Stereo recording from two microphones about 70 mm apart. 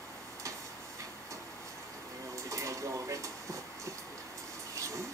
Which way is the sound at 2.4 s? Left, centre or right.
Right.